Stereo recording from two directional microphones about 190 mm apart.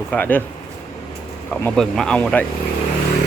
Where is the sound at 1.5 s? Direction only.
5° left (ahead or behind).